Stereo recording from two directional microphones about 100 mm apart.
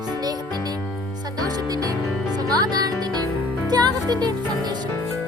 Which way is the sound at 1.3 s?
40° right (ahead or behind).